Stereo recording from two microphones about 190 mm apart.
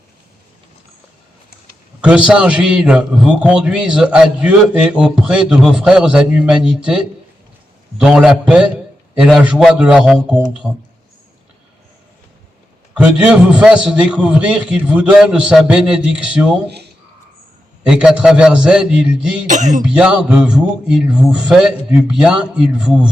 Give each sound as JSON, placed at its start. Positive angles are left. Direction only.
{"t": 2.0, "sound": "a man's voice", "side_deg": -5}
{"t": 12.9, "sound": "a man's voice", "side_deg": -5}
{"t": 17.8, "sound": "a man's voice", "side_deg": -5}
{"t": 19.5, "sound": "speech", "side_deg": -40}
{"t": 19.8, "sound": "a man's voice", "side_deg": -5}